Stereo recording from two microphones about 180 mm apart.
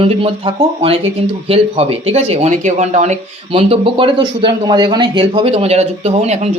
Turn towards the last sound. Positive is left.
turn(degrees=-35)  # may be behind; listen again after turning